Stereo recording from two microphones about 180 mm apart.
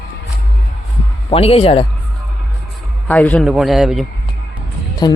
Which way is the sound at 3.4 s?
Centre (ahead or behind).